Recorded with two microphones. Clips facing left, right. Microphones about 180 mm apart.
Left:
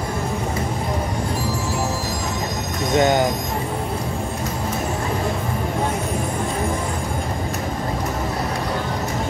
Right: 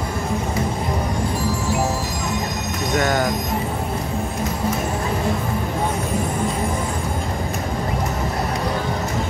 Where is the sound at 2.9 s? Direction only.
20° left (ahead or behind).